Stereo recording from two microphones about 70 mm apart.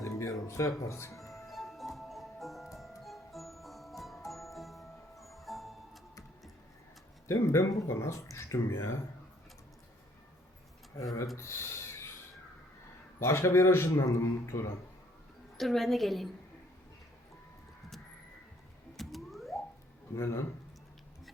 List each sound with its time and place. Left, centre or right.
0.0 s music: left
0.9 s speech: left
1.5 s music: centre
7.3 s speech: left
11.3 s speech: left
13.1 s speech: left
15.5 s a woman's voice: centre
18.9 s a sound: centre
20.1 s speech: left